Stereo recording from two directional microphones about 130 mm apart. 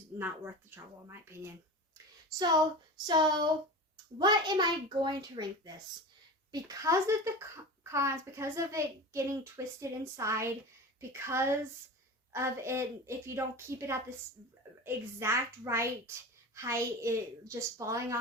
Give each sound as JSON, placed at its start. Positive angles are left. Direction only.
{"t": 0.2, "sound": "speech", "side_deg": -15}
{"t": 2.4, "sound": "speech", "side_deg": -30}